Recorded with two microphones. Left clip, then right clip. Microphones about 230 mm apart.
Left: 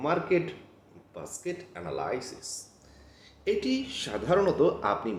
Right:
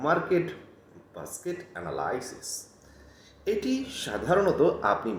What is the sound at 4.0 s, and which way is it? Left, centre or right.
Speech, left.